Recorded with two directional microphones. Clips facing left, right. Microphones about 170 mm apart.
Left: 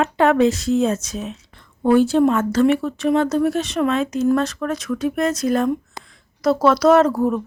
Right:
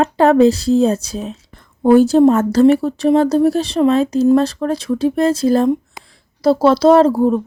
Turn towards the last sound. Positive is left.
turn(degrees=-30)  # may be behind; listen again after turning